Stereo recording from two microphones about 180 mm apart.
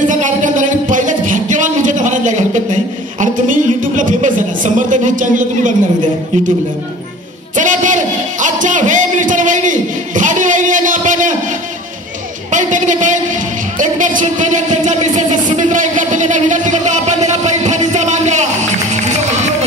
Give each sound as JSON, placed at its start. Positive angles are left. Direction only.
{"t": 0.1, "sound": "music", "side_deg": -45}
{"t": 4.6, "sound": "a woman's voice", "side_deg": -45}
{"t": 7.5, "sound": "music", "side_deg": -45}